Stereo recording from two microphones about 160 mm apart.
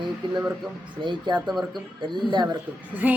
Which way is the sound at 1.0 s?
30° right (ahead or behind).